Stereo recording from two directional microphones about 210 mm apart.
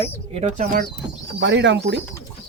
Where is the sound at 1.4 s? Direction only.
60° right (ahead or behind).